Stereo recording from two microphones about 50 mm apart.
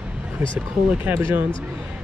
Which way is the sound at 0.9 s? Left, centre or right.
Right.